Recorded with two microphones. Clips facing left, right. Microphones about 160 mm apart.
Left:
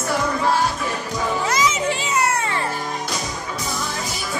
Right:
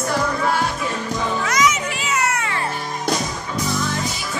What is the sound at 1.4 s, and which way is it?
Children playing, 30° left (ahead or behind).